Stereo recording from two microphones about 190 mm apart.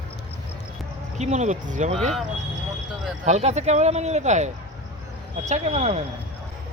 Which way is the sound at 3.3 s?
35° right (ahead or behind).